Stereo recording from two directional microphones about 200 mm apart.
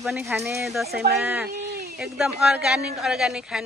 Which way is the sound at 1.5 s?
50° right (ahead or behind).